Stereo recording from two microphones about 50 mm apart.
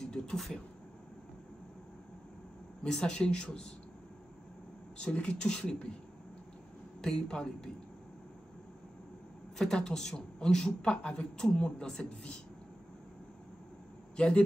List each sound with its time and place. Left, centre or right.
0.0 s a sound: centre
2.8 s speech: centre
4.9 s speech: left
7.0 s a man's voice: centre
9.6 s a man's voice: centre
14.1 s speech: centre